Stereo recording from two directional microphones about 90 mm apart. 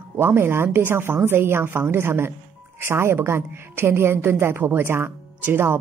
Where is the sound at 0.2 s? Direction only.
25° right (ahead or behind).